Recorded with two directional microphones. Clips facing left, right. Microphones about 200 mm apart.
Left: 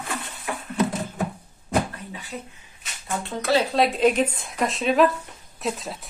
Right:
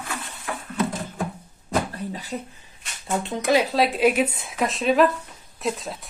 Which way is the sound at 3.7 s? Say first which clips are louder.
Even; centre (ahead or behind).